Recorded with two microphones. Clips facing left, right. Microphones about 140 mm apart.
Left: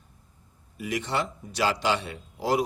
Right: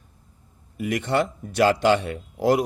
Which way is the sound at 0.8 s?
55° right (ahead or behind).